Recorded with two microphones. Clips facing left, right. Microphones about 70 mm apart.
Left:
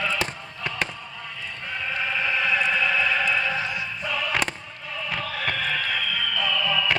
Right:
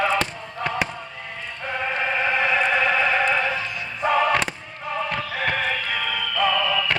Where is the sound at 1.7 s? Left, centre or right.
Right.